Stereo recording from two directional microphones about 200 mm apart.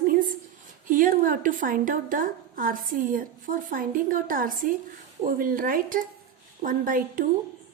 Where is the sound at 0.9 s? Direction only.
45° right (ahead or behind).